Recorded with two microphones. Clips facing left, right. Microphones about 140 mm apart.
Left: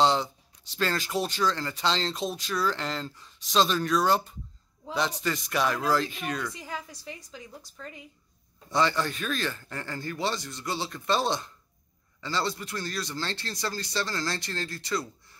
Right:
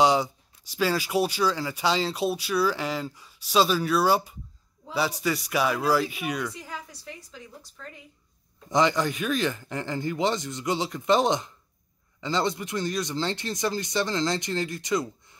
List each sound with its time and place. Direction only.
0.0 s speech: 10° right (ahead or behind)
8.6 s speech: 15° right (ahead or behind)